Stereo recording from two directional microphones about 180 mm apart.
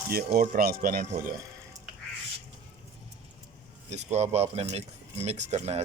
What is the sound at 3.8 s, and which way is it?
Speech, 35° right (ahead or behind).